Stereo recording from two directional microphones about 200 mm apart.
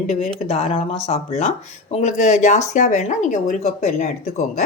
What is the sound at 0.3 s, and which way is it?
Speech, 30° left (ahead or behind).